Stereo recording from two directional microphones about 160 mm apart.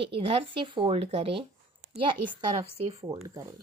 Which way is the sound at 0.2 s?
35° right (ahead or behind).